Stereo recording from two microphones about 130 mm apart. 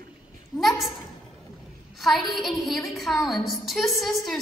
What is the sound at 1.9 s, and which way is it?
A woman's voice, centre (ahead or behind).